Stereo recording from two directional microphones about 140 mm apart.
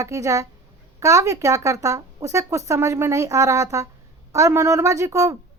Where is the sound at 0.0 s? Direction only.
25° right (ahead or behind).